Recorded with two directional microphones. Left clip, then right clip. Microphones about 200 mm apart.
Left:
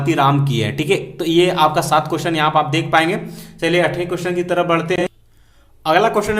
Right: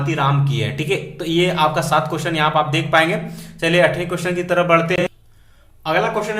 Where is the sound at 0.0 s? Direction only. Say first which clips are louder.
Left 4 dB; 35° left (ahead or behind); by 5.1 s 15° left (ahead or behind).